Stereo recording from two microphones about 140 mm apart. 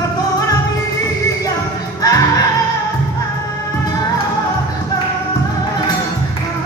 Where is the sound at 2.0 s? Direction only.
25° left (ahead or behind).